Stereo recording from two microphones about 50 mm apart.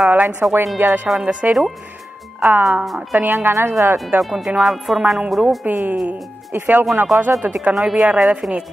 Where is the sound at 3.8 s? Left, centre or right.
Right.